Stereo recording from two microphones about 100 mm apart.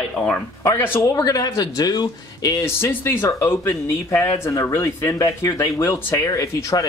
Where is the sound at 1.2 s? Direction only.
35° left (ahead or behind).